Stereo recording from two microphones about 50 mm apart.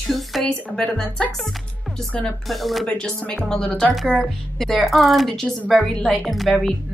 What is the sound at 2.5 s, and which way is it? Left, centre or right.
Speech, centre.